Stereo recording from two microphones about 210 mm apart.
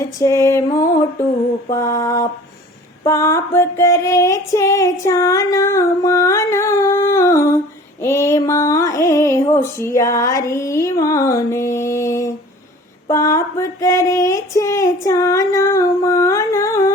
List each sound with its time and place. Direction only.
0.2 s female singing: 15° left (ahead or behind)